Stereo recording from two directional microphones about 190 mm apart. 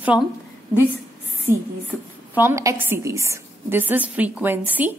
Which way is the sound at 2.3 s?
15° right (ahead or behind).